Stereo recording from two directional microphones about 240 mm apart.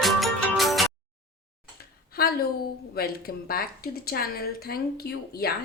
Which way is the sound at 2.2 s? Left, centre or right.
Left.